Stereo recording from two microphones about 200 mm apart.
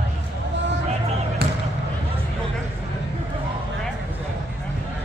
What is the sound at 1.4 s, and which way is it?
Basketball bounce, 55° right (ahead or behind).